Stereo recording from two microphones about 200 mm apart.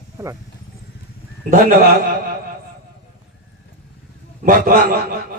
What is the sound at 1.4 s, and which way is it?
Speech, 45° right (ahead or behind).